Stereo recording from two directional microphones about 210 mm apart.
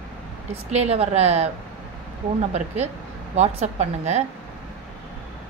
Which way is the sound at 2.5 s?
30° right (ahead or behind).